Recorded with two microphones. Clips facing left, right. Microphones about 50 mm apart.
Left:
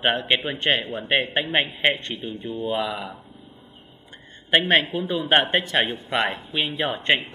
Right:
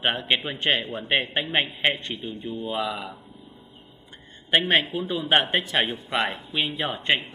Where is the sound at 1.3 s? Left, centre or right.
Centre.